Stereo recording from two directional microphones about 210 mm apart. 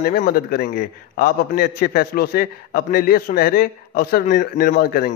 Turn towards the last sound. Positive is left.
turn(degrees=45)  # may be behind; listen again after turning